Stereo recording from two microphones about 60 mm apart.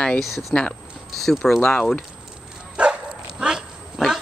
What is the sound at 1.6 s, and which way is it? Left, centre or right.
Speech, left.